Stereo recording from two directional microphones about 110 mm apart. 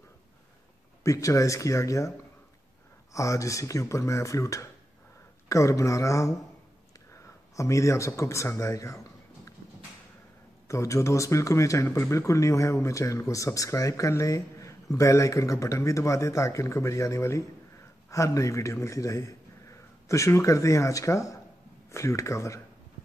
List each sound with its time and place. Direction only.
1.0 s speech: 30° left (ahead or behind)
7.5 s a man's voice: 30° left (ahead or behind)
10.7 s a man's voice: 30° left (ahead or behind)